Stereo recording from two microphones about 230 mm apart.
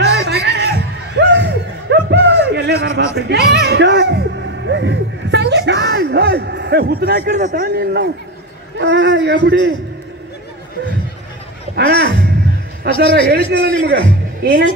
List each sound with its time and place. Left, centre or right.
0.0 s music: right
0.7 s a sound: right
3.2 s music: right
8.7 s a man's voice: right
11.7 s a man's voice: right